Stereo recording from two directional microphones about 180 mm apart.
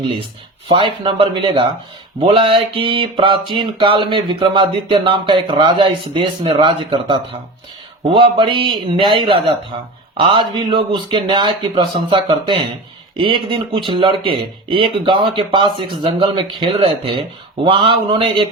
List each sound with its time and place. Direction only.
0.7 s speech: 30° right (ahead or behind)